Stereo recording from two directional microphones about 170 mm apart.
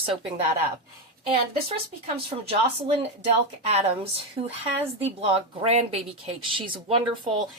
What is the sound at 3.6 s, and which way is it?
A woman's voice, 40° right (ahead or behind).